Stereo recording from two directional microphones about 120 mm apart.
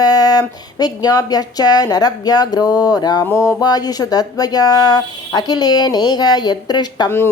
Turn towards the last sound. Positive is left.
turn(degrees=35)  # may be behind; listen again after turning